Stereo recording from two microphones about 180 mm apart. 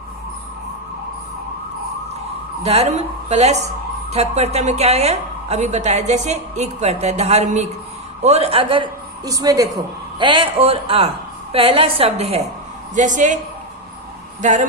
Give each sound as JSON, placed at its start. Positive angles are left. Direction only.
{"t": 2.6, "sound": "a woman's voice", "side_deg": -35}
{"t": 14.4, "sound": "speech", "side_deg": -45}